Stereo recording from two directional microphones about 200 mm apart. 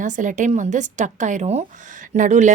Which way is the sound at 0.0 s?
40° right (ahead or behind).